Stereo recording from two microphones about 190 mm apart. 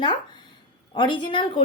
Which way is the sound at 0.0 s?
25° left (ahead or behind).